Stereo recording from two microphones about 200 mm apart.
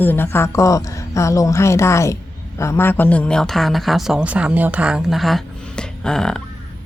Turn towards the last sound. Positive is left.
turn(degrees=5)  # may be behind; listen again after turning